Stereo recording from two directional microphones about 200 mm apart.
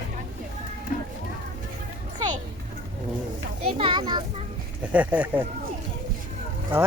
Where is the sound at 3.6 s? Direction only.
25° right (ahead or behind).